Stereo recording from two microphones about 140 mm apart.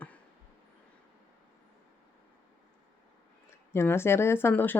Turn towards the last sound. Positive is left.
turn(degrees=15)  # may be behind; listen again after turning